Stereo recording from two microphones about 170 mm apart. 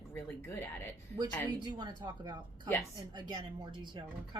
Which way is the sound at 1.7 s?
25° right (ahead or behind).